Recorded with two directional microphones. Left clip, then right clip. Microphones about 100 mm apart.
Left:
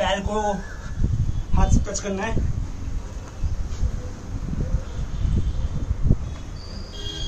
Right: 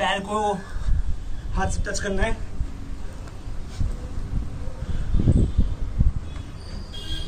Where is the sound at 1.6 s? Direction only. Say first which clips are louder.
Even; 55° right (ahead or behind).